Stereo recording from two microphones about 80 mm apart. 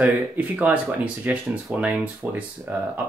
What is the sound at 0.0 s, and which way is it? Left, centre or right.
Speech, centre.